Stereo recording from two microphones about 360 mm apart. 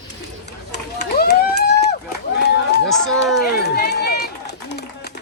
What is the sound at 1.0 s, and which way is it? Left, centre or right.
Speech, left.